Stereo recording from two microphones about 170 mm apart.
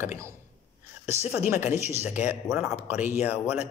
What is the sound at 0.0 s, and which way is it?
Speech, 15° right (ahead or behind).